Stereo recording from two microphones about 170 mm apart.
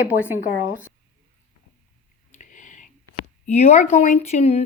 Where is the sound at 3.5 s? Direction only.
40° left (ahead or behind).